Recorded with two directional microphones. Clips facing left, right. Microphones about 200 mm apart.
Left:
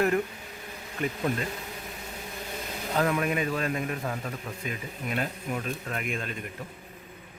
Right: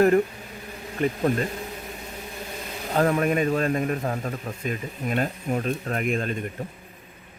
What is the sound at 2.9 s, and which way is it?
A man's voice, 40° right (ahead or behind).